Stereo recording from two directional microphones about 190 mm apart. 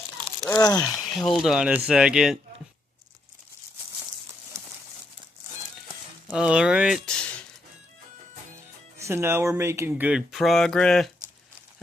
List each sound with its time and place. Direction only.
0.5 s speech: 20° left (ahead or behind)
0.9 s speech: centre (ahead or behind)
6.3 s speech: 5° right (ahead or behind)
9.0 s speech: 15° right (ahead or behind); by 11.1 s 5° left (ahead or behind)